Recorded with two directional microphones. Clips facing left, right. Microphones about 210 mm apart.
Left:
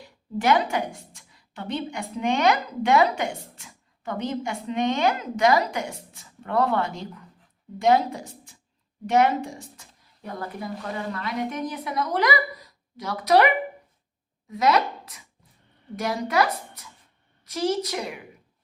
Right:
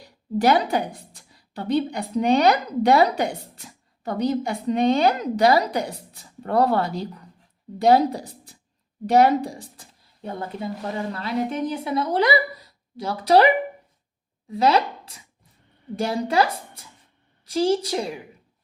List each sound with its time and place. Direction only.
0.0 s a woman's voice: 35° right (ahead or behind)
14.5 s a woman's voice: 30° right (ahead or behind)